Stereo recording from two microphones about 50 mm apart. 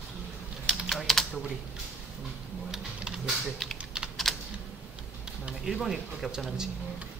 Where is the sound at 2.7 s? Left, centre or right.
Centre.